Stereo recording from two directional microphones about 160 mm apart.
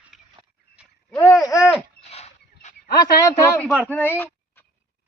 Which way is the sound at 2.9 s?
25° left (ahead or behind).